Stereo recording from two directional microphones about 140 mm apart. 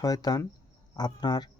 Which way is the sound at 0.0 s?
25° left (ahead or behind).